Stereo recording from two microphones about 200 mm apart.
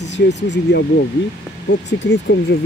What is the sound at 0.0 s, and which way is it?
Speech, 60° left (ahead or behind).